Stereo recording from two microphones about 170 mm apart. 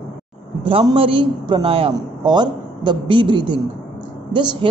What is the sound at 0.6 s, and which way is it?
A man's voice, 30° right (ahead or behind).